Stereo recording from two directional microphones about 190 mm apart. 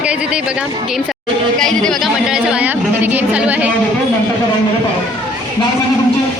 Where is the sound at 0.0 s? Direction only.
5° right (ahead or behind).